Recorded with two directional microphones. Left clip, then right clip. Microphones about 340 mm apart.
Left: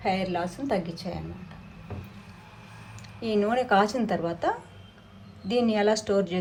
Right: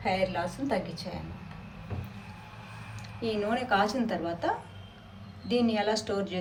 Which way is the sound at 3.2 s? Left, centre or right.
Centre.